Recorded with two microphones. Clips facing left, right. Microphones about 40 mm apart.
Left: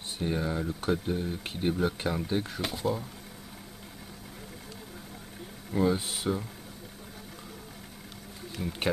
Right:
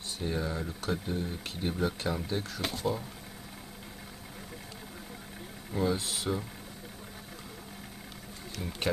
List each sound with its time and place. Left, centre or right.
0.2 s speech: centre
1.4 s speech: centre
1.7 s speech: centre
2.6 s speech: centre
5.7 s speech: centre
8.6 s speech: centre